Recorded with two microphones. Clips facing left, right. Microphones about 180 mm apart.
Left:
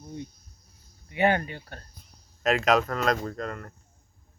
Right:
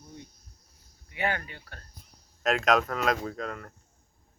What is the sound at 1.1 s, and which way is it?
Speech, 25° left (ahead or behind).